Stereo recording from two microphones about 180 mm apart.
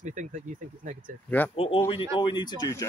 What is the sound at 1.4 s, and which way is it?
Speech, 10° left (ahead or behind).